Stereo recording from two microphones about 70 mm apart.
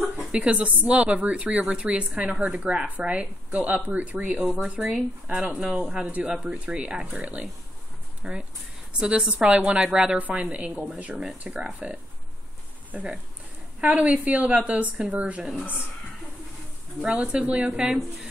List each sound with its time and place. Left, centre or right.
0.3 s a woman's voice: centre
17.0 s speech: centre